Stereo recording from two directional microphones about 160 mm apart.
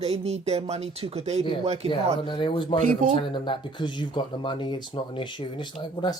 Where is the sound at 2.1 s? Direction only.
30° left (ahead or behind).